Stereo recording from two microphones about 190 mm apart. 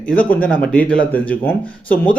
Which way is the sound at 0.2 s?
5° left (ahead or behind).